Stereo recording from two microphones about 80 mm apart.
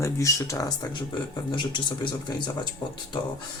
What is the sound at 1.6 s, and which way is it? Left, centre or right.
Speech, left.